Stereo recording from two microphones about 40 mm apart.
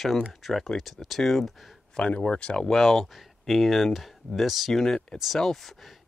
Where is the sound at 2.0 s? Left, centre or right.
Left.